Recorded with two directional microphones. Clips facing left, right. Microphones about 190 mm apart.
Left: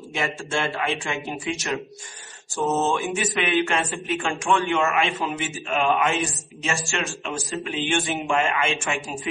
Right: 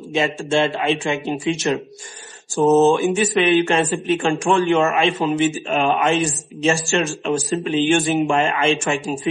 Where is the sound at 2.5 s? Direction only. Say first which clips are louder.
Right 9 dB; 40° right (ahead or behind).